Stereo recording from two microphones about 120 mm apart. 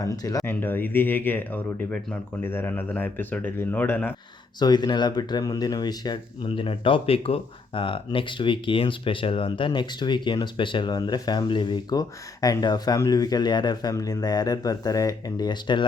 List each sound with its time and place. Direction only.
0.0 s speech: 30° left (ahead or behind)
0.4 s speech: 15° left (ahead or behind)
4.6 s speech: 35° left (ahead or behind)